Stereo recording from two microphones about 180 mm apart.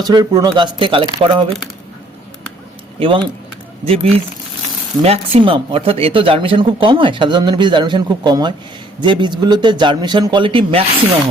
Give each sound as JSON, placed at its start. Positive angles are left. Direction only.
{"t": 0.0, "sound": "speech", "side_deg": -20}
{"t": 3.0, "sound": "speech", "side_deg": -30}